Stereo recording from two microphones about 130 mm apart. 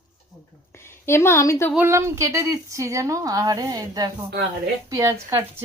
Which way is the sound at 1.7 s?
20° right (ahead or behind).